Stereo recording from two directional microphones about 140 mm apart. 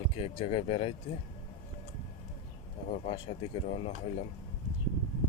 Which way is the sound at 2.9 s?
40° left (ahead or behind).